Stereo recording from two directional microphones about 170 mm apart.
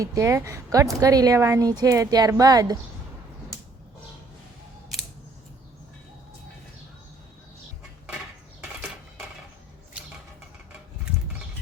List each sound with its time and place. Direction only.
0.0 s a woman's voice: 20° right (ahead or behind)